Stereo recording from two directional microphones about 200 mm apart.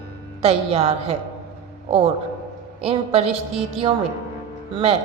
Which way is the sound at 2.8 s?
30° right (ahead or behind).